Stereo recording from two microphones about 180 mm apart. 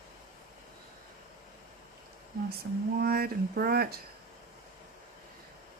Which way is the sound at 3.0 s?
55° right (ahead or behind).